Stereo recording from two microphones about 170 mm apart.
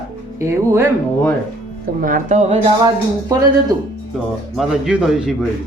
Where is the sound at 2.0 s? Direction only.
55° right (ahead or behind).